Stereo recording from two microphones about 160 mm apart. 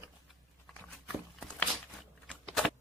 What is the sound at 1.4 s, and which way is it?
Crumpling, 5° left (ahead or behind).